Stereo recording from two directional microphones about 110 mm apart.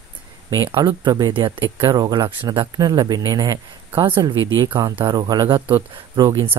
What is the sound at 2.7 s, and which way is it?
Speech, 35° right (ahead or behind).